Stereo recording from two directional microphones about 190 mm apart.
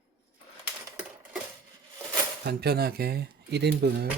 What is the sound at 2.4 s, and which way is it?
Speech, 55° right (ahead or behind).